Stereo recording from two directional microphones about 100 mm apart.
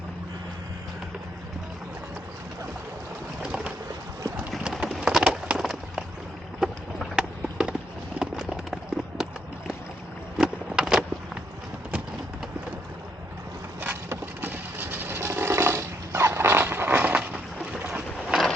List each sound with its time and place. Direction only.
3.4 s boat: 10° right (ahead or behind)
4.5 s bird: 5° right (ahead or behind)
6.6 s a sound: 5° right (ahead or behind)
8.2 s run: 5° right (ahead or behind)
10.3 s vehicle: 5° right (ahead or behind)
13.8 s a sound: 20° right (ahead or behind)